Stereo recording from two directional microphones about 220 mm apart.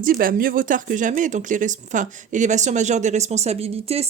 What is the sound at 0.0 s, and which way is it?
Speech, 40° right (ahead or behind).